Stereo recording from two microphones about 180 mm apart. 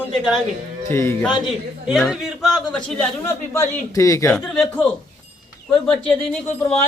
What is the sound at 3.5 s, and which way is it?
Speech, 15° left (ahead or behind).